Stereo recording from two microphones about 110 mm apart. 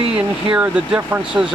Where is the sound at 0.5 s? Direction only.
15° right (ahead or behind).